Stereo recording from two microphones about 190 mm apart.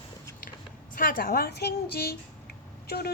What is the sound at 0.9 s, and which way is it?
Speech, 50° left (ahead or behind).